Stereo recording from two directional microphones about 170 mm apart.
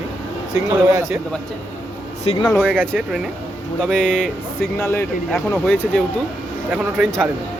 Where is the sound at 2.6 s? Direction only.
10° right (ahead or behind).